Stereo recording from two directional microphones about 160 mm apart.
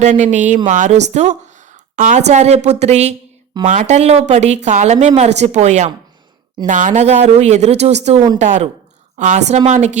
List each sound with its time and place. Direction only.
0.0 s a woman's voice: 45° right (ahead or behind)